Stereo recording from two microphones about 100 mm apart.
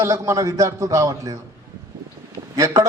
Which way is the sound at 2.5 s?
35° right (ahead or behind).